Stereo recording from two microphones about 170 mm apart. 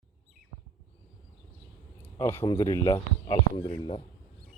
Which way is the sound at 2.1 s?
15° left (ahead or behind).